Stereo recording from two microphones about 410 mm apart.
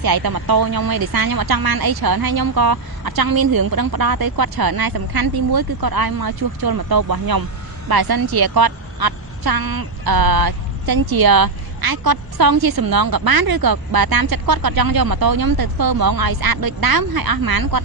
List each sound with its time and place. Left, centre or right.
0.0 s a woman's voice: right